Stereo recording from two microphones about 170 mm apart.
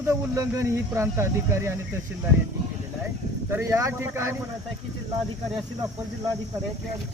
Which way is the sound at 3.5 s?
15° right (ahead or behind).